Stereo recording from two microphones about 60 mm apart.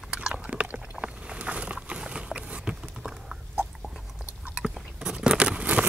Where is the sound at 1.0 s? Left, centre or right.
Centre.